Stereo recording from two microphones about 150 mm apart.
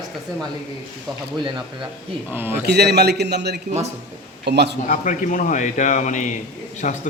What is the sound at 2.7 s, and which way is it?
A man's voice, 90° right.